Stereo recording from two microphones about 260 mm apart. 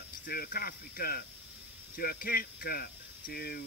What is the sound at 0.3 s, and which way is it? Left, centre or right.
Speech, left.